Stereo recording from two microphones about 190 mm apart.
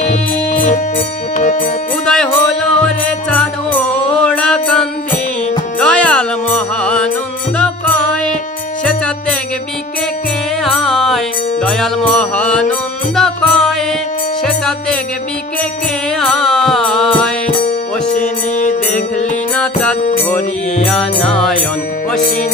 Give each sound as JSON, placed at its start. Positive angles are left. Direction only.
{"t": 0.0, "sound": "music", "side_deg": 40}
{"t": 2.0, "sound": "music", "side_deg": 5}
{"t": 10.6, "sound": "music", "side_deg": 0}
{"t": 16.2, "sound": "music", "side_deg": 0}
{"t": 17.6, "sound": "music", "side_deg": 40}
{"t": 19.5, "sound": "music", "side_deg": 5}